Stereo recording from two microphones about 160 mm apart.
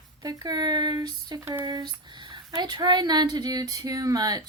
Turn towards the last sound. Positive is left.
turn(degrees=-25)  # may be behind; listen again after turning